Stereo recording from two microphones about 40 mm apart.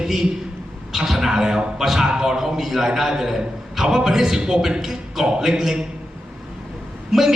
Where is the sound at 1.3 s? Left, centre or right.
Centre.